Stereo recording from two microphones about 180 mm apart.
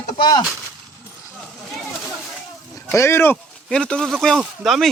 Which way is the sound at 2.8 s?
15° left (ahead or behind).